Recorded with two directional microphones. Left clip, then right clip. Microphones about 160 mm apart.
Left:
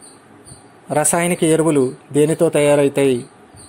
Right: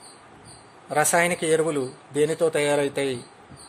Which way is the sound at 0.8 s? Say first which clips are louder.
Left 3 dB; 35° left (ahead or behind).